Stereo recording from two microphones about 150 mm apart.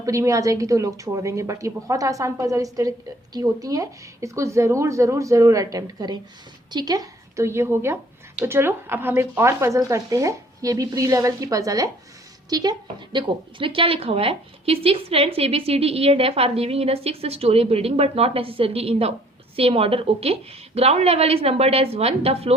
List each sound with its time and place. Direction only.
0.0 s a woman's voice: 20° right (ahead or behind); by 22.5 s 40° right (ahead or behind)